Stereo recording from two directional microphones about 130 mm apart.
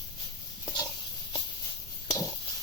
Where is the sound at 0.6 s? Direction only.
35° left (ahead or behind).